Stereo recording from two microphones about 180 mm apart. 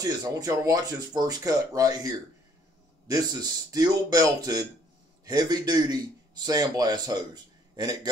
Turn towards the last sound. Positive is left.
turn(degrees=-20)  # may be behind; listen again after turning